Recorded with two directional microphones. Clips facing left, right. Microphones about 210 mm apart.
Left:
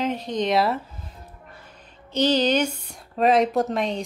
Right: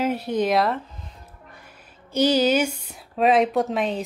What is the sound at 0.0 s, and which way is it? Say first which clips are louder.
Speech: right 2 dB; 10° right (ahead or behind).